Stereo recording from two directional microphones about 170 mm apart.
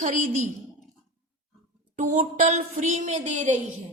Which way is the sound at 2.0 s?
50° right (ahead or behind).